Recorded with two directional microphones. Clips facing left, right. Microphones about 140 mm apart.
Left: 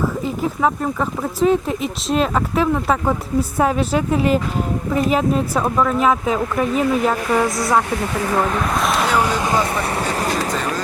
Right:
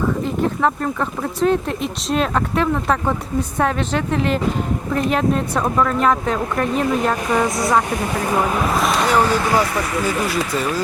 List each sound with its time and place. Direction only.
0.2 s a woman's voice: 5° left (ahead or behind)
7.3 s speech: 20° right (ahead or behind); by 9.1 s centre (ahead or behind)
9.1 s a woman's voice: 15° left (ahead or behind)
9.7 s speech: 35° left (ahead or behind)